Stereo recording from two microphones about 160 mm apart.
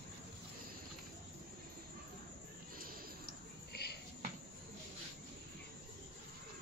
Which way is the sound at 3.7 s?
90° left.